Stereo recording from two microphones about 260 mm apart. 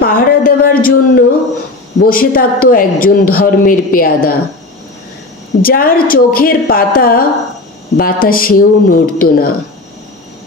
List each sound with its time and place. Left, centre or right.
0.0 s a sound: left
2.0 s speech: left
5.6 s speech: left